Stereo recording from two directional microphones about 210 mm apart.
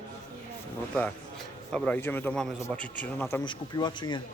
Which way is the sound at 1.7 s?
5° left (ahead or behind).